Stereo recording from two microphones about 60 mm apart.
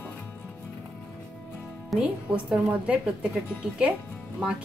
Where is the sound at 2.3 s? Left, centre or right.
Right.